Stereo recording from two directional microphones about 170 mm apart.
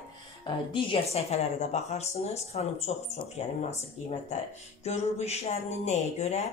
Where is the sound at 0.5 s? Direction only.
30° left (ahead or behind).